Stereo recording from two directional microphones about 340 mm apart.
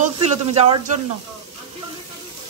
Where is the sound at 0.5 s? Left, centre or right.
Centre.